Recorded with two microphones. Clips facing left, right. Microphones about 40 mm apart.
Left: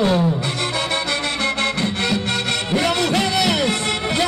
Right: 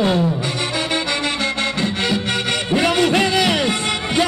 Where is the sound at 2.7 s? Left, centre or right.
Right.